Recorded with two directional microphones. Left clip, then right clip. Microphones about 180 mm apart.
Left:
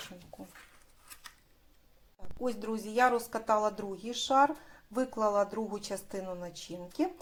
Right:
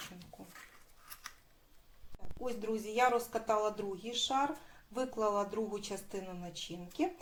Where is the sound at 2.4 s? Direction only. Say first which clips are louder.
Left 3 dB; 40° left (ahead or behind).